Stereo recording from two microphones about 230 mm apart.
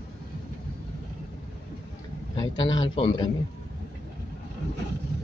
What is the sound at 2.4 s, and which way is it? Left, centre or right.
Speech, centre.